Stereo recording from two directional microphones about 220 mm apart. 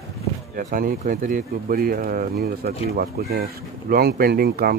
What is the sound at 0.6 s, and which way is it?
Speech, 40° right (ahead or behind).